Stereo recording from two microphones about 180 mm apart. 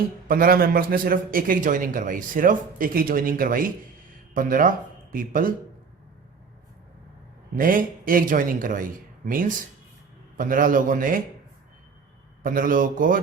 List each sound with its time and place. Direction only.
0.3 s a man's voice: 50° right (ahead or behind)
7.5 s a man's voice: 50° right (ahead or behind)
12.4 s a man's voice: 50° right (ahead or behind)